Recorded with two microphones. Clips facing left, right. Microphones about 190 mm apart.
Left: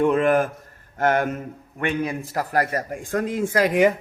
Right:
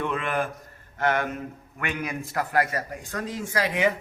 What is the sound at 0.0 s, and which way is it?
A man's voice, 40° left (ahead or behind).